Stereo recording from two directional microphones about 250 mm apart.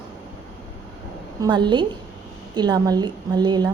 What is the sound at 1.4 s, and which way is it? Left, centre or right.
A woman's voice, centre.